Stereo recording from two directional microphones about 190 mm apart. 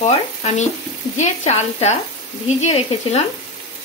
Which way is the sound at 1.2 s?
35° left (ahead or behind).